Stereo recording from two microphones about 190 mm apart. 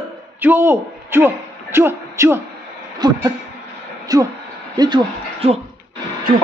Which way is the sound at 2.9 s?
20° right (ahead or behind).